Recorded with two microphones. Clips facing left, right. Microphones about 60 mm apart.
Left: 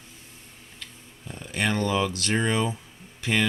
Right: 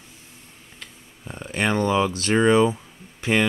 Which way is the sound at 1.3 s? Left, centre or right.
Right.